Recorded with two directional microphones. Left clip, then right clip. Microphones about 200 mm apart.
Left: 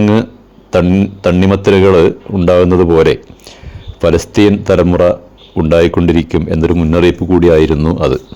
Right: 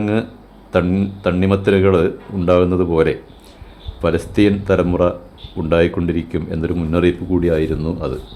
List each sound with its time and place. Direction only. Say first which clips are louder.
0.0 s speech: left 8 dB; 35° left (ahead or behind)